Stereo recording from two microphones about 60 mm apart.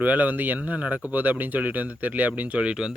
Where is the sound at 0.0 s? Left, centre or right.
Right.